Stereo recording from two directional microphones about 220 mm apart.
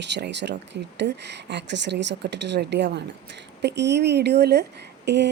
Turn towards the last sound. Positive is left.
turn(degrees=-50)  # may be behind; listen again after turning